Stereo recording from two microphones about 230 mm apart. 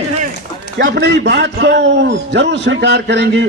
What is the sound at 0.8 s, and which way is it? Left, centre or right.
A man's voice, right.